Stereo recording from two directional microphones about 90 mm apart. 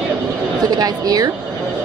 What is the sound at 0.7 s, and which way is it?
Speech, 50° right (ahead or behind).